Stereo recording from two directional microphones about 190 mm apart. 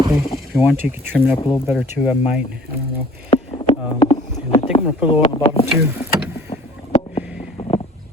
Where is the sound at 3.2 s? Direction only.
30° left (ahead or behind).